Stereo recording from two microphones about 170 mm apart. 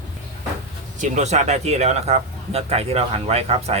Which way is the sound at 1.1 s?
40° right (ahead or behind).